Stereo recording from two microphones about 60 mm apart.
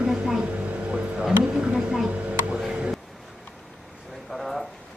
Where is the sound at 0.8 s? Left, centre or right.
Right.